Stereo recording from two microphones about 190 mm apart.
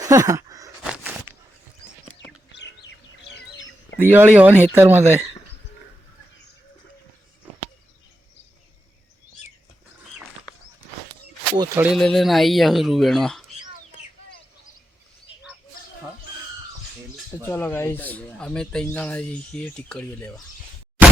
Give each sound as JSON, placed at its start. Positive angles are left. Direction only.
{"t": 0.0, "sound": "a sound", "side_deg": -15}
{"t": 0.9, "sound": "a sound", "side_deg": -5}
{"t": 2.6, "sound": "chicken", "side_deg": 65}
{"t": 3.2, "sound": "bird", "side_deg": 65}
{"t": 3.9, "sound": "speech", "side_deg": -10}
{"t": 11.5, "sound": "speech", "side_deg": -15}
{"t": 11.9, "sound": "speech", "side_deg": 0}
{"t": 17.4, "sound": "speech", "side_deg": 10}